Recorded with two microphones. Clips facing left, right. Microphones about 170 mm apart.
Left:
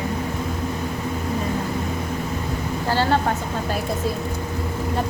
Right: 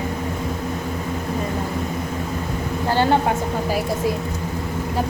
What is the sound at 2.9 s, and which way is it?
Speech, 20° right (ahead or behind).